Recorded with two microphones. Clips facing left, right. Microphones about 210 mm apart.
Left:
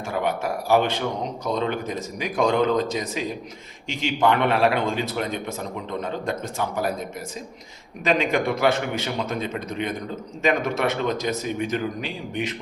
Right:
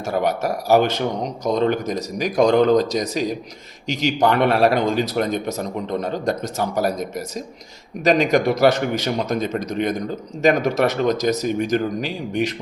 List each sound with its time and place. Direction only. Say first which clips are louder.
0.0 s a man's voice: right 4 dB; 40° right (ahead or behind)